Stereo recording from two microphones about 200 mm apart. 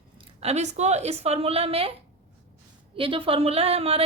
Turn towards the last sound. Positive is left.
turn(degrees=-30)  # may be behind; listen again after turning